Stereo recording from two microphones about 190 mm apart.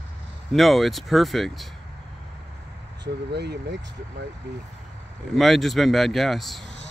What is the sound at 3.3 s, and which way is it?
Speech, 60° right (ahead or behind).